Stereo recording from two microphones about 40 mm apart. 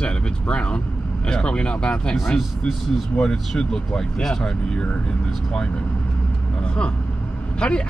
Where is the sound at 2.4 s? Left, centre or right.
Centre.